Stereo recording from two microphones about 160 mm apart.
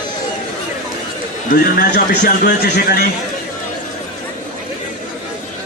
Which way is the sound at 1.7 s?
65° left (ahead or behind).